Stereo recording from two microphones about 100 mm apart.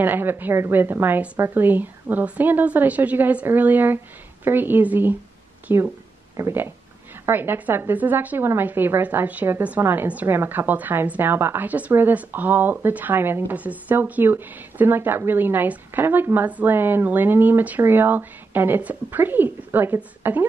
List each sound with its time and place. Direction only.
0.0 s a woman's voice: 20° right (ahead or behind)